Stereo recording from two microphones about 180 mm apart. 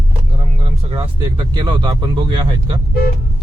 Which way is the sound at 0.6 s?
30° right (ahead or behind).